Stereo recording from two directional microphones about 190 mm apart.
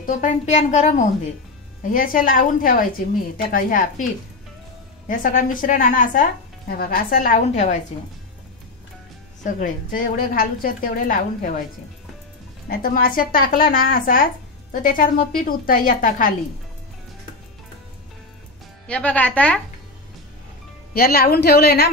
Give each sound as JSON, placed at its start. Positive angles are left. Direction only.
{"t": 0.0, "sound": "a woman's voice", "side_deg": 45}
{"t": 9.4, "sound": "speech", "side_deg": 45}
{"t": 12.6, "sound": "speech", "side_deg": 50}
{"t": 18.9, "sound": "speech", "side_deg": 5}
{"t": 20.9, "sound": "a woman's voice", "side_deg": 55}